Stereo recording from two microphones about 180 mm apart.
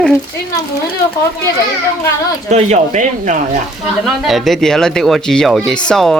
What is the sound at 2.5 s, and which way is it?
Speech, 40° right (ahead or behind).